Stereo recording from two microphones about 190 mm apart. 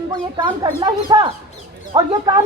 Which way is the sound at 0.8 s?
20° right (ahead or behind).